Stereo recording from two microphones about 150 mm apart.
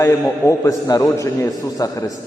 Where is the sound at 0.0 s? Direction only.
20° left (ahead or behind).